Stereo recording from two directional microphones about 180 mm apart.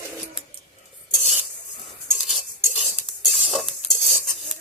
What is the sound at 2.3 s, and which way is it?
Stir, centre (ahead or behind).